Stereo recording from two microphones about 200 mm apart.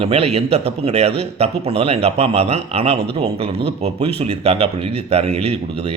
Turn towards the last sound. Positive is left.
turn(degrees=-30)  # may be behind; listen again after turning